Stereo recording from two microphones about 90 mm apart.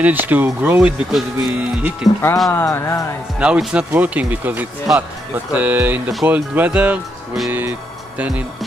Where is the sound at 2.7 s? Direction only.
35° left (ahead or behind).